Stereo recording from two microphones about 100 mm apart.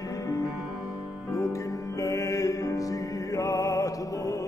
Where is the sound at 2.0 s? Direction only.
30° left (ahead or behind).